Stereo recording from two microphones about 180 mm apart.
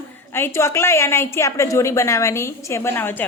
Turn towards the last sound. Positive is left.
turn(degrees=10)  # may be behind; listen again after turning